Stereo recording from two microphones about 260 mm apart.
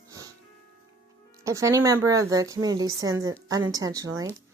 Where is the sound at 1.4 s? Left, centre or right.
Centre.